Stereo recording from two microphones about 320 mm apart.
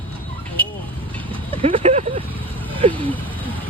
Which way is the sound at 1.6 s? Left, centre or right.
Centre.